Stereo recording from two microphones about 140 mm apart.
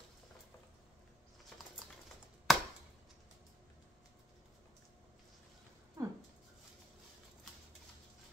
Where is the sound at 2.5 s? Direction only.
Centre (ahead or behind).